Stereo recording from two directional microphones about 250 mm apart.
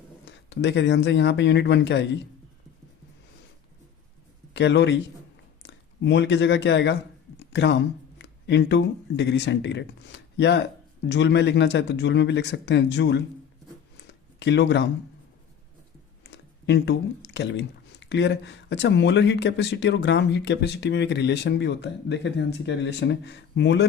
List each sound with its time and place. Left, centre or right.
0.3 s speech: left
4.5 s speech: left
7.3 s a sound: left
8.2 s speech: left
13.9 s a sound: left
16.3 s speech: left